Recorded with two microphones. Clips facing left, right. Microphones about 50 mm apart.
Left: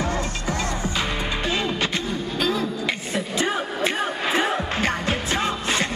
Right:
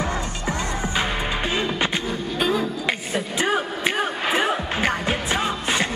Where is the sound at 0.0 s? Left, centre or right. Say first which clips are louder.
Even; right.